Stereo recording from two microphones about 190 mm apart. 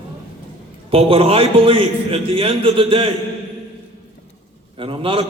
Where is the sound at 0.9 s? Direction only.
30° right (ahead or behind).